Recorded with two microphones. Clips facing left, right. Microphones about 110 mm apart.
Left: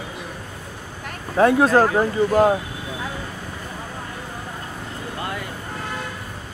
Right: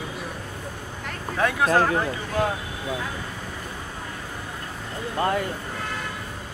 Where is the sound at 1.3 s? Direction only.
35° left (ahead or behind).